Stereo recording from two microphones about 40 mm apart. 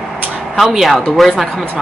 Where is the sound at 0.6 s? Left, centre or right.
Centre.